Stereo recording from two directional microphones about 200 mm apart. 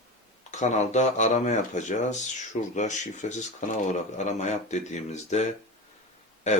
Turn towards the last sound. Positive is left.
turn(degrees=35)  # may be behind; listen again after turning